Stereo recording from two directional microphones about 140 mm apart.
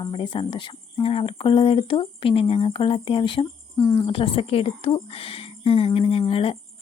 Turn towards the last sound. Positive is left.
turn(degrees=40)  # may be behind; listen again after turning